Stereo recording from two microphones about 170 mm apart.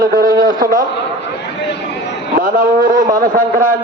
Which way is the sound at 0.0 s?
55° right (ahead or behind).